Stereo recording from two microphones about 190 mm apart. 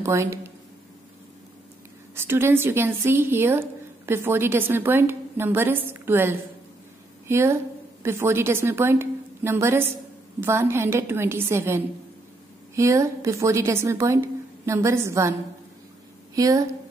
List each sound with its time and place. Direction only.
0.0 s speech: 15° right (ahead or behind)
2.1 s a woman's voice: 10° right (ahead or behind)
16.3 s speech: 15° right (ahead or behind)